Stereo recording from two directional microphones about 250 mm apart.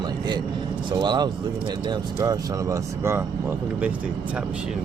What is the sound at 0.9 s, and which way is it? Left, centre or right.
Speech, centre.